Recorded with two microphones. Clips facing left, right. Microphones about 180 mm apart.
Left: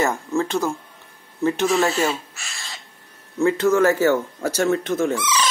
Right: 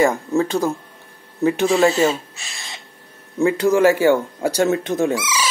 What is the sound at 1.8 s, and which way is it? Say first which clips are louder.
Speech: right 5 dB; 15° right (ahead or behind).